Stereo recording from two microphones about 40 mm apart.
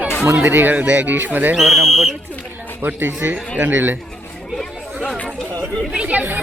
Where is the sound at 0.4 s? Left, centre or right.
Right.